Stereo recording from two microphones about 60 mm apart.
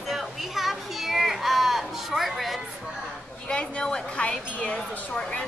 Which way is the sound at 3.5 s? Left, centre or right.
Centre.